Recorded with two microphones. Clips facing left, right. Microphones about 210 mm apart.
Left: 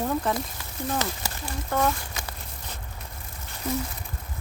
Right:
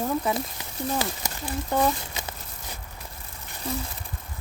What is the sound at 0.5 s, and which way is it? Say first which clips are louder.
Speech: right 1 dB; 15° right (ahead or behind).